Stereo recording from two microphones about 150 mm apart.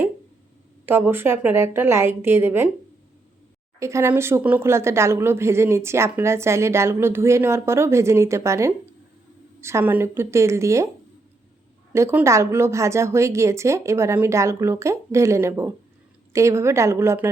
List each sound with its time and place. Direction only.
0.9 s speech: 15° right (ahead or behind)
3.8 s a woman's voice: 20° right (ahead or behind)
11.9 s a woman's voice: 20° right (ahead or behind)